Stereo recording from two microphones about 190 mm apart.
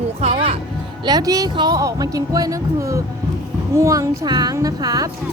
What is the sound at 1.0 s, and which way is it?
A woman's voice, 20° right (ahead or behind).